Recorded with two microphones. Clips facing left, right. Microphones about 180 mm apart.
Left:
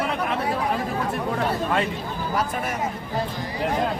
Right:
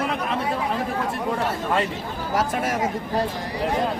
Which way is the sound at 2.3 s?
90° right.